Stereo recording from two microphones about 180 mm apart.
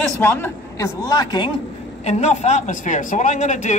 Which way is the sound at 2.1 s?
35° left (ahead or behind).